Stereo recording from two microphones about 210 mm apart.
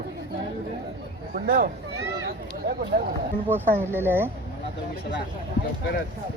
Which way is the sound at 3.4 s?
10° right (ahead or behind).